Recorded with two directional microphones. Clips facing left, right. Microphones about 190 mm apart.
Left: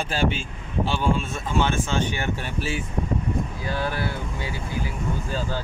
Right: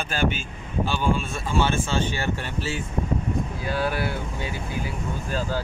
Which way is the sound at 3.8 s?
10° right (ahead or behind).